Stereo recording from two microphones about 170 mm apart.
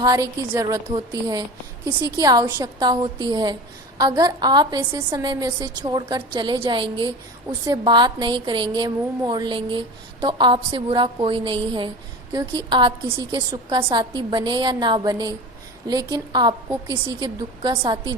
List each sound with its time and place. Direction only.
0.0 s a woman's voice: 20° right (ahead or behind)